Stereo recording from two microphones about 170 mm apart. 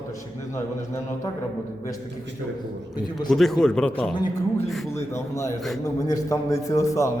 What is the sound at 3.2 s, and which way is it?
Speech, centre (ahead or behind).